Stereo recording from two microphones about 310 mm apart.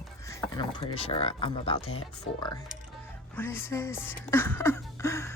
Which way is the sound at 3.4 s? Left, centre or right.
Centre.